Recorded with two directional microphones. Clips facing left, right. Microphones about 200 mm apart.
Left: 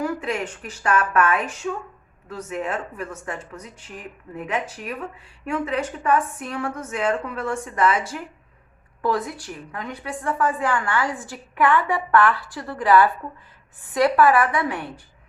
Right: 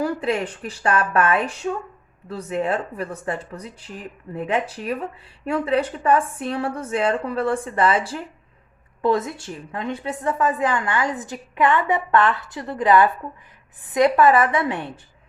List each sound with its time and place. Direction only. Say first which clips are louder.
0.0 s a woman's voice: right 3 dB; 35° right (ahead or behind)